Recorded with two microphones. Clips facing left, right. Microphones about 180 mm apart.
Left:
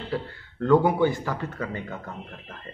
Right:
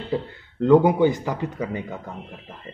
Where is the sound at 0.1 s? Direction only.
20° right (ahead or behind).